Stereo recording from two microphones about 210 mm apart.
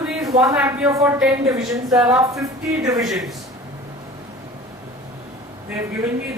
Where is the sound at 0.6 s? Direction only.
15° right (ahead or behind).